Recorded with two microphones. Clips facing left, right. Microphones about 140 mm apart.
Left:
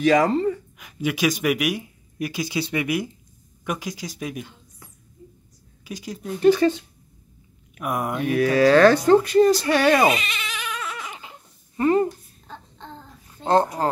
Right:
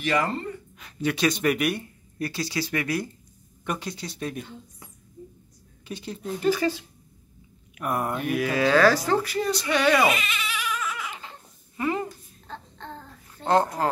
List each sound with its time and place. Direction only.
0.0 s speech: 90° left
0.7 s speech: 5° left (ahead or behind)
3.6 s speech: 5° left (ahead or behind)
5.9 s speech: 10° left (ahead or behind)
6.5 s speech: 25° left (ahead or behind)
7.8 s speech: 10° left (ahead or behind)
8.5 s speech: 30° left (ahead or behind)
11.1 s a sound: 20° left (ahead or behind)
11.7 s a sound: 35° left (ahead or behind)
13.4 s speech: 20° left (ahead or behind)